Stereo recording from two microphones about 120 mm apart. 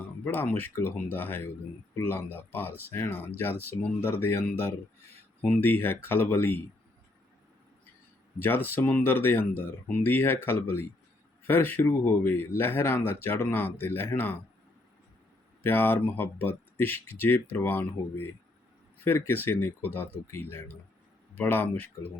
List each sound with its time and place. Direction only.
0.3 s speech: 15° left (ahead or behind)
8.4 s speech: 15° left (ahead or behind)
15.6 s speech: 20° left (ahead or behind)